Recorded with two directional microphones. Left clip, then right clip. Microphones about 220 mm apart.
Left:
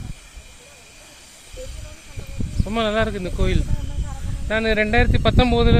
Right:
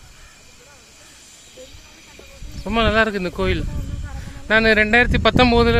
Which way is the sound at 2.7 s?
15° right (ahead or behind).